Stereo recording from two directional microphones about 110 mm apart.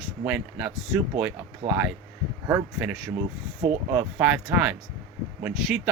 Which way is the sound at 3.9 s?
10° right (ahead or behind).